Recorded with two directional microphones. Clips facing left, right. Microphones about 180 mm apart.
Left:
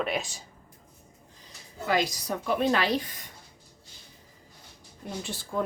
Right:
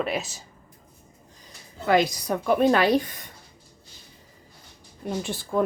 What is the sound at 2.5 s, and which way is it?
Speech, 50° right (ahead or behind).